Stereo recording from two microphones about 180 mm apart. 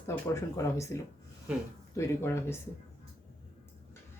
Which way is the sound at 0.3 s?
15° left (ahead or behind).